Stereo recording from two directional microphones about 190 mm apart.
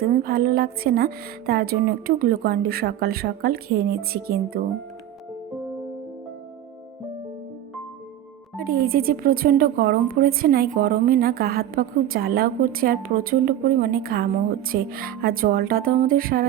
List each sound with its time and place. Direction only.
0.0 s speech: 50° right (ahead or behind)
8.5 s speech: 50° right (ahead or behind)